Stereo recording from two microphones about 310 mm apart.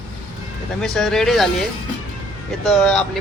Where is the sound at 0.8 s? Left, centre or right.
Centre.